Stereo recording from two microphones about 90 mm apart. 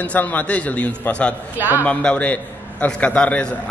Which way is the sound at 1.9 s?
15° left (ahead or behind).